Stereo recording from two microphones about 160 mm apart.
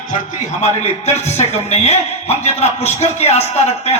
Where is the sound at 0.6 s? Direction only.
45° left (ahead or behind).